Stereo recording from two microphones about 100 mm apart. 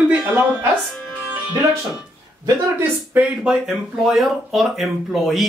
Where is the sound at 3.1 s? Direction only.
15° right (ahead or behind).